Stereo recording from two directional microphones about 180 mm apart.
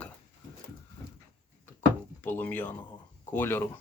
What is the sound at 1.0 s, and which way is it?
Dog, 25° left (ahead or behind).